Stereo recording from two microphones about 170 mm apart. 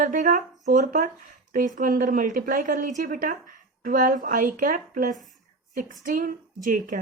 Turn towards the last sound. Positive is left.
turn(degrees=-50)  # may be behind; listen again after turning